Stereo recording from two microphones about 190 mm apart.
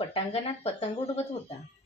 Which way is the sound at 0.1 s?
30° left (ahead or behind).